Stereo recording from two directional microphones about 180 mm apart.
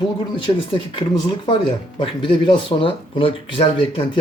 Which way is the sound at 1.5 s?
25° left (ahead or behind).